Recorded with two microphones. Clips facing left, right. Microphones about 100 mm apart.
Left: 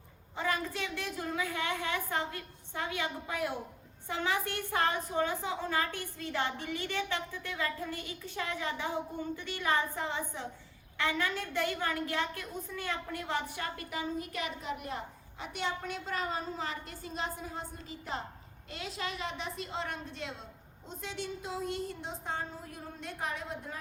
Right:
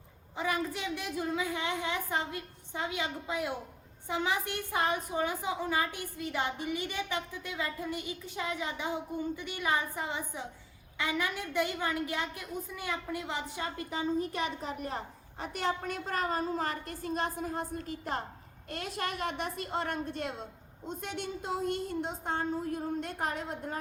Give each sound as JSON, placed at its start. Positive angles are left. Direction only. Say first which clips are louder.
{"t": 0.3, "sound": "a woman's voice", "louder": "right 1 dB", "side_deg": -15}